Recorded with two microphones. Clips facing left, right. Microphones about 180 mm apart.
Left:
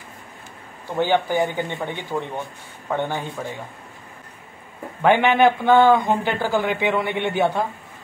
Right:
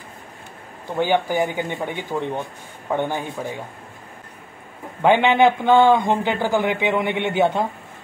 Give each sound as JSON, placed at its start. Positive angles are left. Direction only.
{"t": 0.8, "sound": "speech", "side_deg": -15}
{"t": 5.0, "sound": "a man's voice", "side_deg": -20}